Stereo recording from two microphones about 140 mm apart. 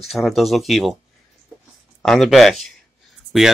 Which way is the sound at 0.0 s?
Centre (ahead or behind).